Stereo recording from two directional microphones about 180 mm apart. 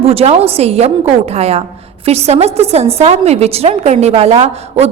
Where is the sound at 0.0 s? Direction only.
35° right (ahead or behind).